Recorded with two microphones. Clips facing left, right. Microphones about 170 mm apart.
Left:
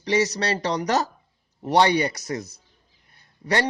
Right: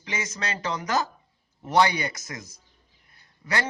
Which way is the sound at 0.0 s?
35° left (ahead or behind).